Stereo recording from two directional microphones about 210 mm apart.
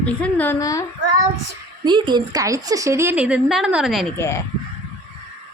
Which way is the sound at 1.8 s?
20° right (ahead or behind).